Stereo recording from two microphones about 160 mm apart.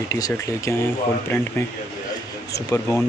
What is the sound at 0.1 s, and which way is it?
Speech, 20° left (ahead or behind).